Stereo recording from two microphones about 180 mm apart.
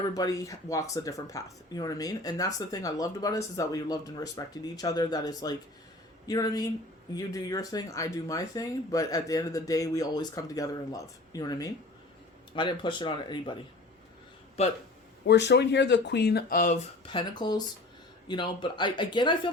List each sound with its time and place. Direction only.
0.1 s speech: 20° left (ahead or behind)
15.3 s speech: 70° left (ahead or behind); by 16.7 s 55° left (ahead or behind)
17.1 s speech: 25° left (ahead or behind)